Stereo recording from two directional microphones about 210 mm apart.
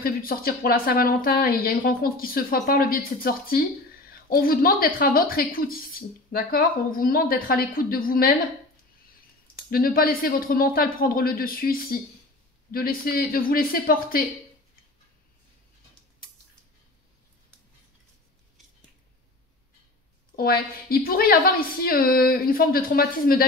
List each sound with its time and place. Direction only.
0.0 s a woman's voice: 45° left (ahead or behind)
9.7 s a woman's voice: 45° left (ahead or behind)
20.3 s a woman's voice: 45° left (ahead or behind)